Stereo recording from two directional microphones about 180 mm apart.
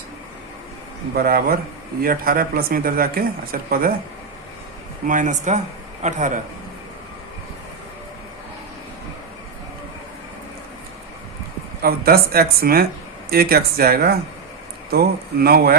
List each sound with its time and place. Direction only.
1.1 s speech: 55° right (ahead or behind)
5.0 s speech: 45° right (ahead or behind)
11.8 s speech: 55° right (ahead or behind)